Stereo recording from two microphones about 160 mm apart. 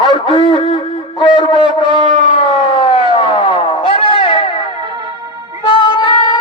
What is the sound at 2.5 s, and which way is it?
Siren, 35° left (ahead or behind).